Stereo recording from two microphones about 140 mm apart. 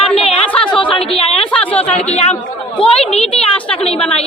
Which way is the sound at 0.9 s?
45° left (ahead or behind).